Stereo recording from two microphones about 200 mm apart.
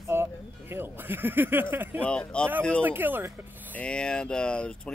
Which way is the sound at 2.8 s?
10° right (ahead or behind).